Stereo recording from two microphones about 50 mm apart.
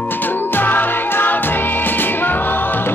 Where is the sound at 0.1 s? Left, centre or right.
Left.